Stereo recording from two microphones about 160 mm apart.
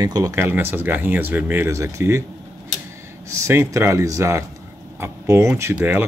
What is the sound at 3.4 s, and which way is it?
Speech, 15° right (ahead or behind).